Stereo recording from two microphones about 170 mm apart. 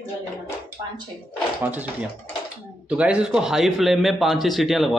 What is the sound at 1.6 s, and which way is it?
Speech, 10° right (ahead or behind).